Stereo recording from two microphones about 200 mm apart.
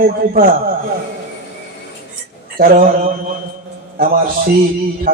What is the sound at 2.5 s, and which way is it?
Speech, 45° right (ahead or behind).